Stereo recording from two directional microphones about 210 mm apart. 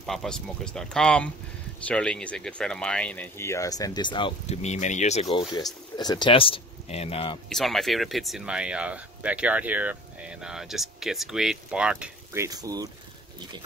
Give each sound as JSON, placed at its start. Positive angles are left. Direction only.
{"t": 0.0, "sound": "speech", "side_deg": 0}
{"t": 5.5, "sound": "speech", "side_deg": 20}
{"t": 7.4, "sound": "speech", "side_deg": 0}
{"t": 12.4, "sound": "speech", "side_deg": -15}